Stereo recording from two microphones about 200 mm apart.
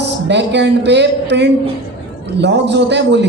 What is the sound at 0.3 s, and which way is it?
A man's voice, 60° right (ahead or behind).